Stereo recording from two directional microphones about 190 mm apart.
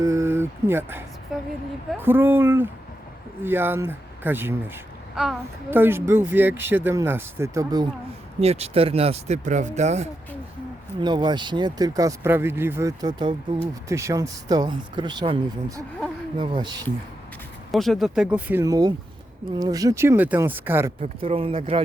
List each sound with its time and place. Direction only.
0.0 s speech: 15° right (ahead or behind)
8.4 s speech: 35° right (ahead or behind)
11.0 s speech: 25° right (ahead or behind)
17.7 s speech: centre (ahead or behind)
18.6 s speech: 20° right (ahead or behind)
21.0 s speech: 30° right (ahead or behind)